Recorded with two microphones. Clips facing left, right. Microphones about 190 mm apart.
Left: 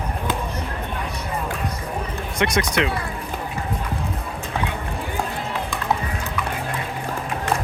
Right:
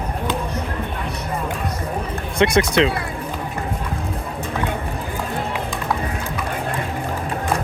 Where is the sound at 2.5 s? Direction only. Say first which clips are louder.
Right 5 dB; 30° right (ahead or behind).